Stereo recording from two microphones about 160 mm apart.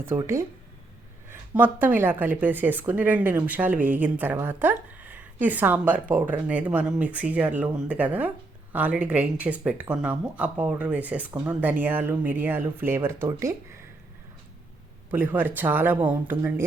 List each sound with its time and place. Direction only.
0.2 s speech: 20° right (ahead or behind)
15.1 s speech: 10° right (ahead or behind)